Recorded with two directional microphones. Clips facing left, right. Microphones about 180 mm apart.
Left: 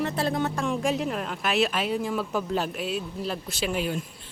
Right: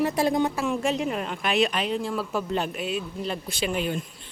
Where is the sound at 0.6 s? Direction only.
Centre (ahead or behind).